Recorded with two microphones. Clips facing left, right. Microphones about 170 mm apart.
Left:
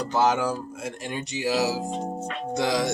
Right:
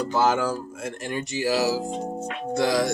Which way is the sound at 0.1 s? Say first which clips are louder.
Left 1 dB; 20° left (ahead or behind).